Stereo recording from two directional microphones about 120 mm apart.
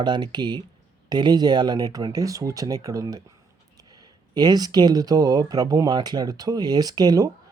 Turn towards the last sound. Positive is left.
turn(degrees=-35)  # may be behind; listen again after turning